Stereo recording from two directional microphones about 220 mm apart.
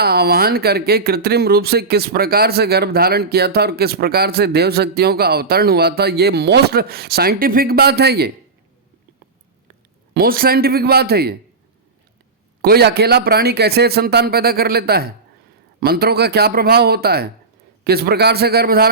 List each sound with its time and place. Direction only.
0.0 s speech: 45° right (ahead or behind)
10.2 s speech: 40° right (ahead or behind)
12.6 s speech: 45° right (ahead or behind)